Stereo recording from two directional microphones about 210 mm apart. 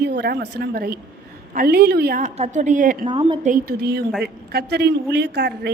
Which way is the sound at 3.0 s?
20° right (ahead or behind).